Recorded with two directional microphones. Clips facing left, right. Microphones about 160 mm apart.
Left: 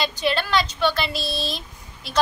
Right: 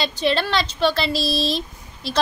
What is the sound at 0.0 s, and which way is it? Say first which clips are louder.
A woman's voice: right 2 dB; 30° right (ahead or behind).